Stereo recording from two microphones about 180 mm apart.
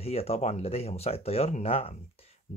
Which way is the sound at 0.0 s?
35° left (ahead or behind).